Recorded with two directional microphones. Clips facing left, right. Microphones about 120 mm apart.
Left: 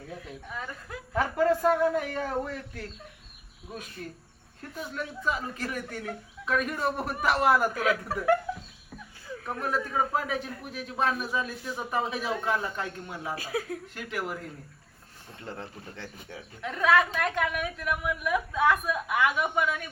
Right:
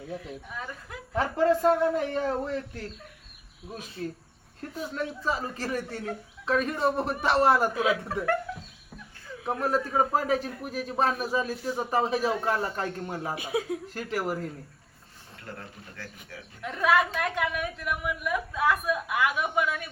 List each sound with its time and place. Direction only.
1.1 s a man's voice: 25° right (ahead or behind)
4.9 s a man's voice: 35° right (ahead or behind)
8.0 s speech: 5° left (ahead or behind)
9.6 s a man's voice: 35° right (ahead or behind)
13.3 s a man's voice: 20° right (ahead or behind)
13.8 s a man's voice: 35° right (ahead or behind)
15.4 s a man's voice: 25° left (ahead or behind)
16.6 s a woman's voice: 5° right (ahead or behind)